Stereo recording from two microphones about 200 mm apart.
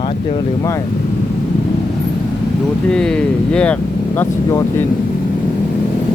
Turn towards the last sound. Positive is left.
turn(degrees=10)  # may be behind; listen again after turning